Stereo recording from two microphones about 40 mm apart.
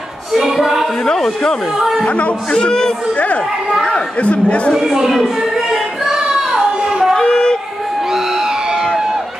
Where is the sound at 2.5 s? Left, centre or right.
Centre.